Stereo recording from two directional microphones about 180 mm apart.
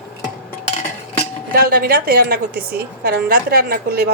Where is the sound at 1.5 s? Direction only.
55° right (ahead or behind).